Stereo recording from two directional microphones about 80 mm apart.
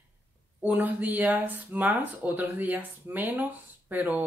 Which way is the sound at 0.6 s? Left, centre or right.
Right.